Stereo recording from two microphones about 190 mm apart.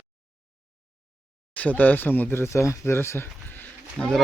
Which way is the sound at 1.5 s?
10° left (ahead or behind).